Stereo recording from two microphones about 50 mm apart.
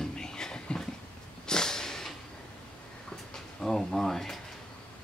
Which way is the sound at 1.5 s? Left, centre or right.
Centre.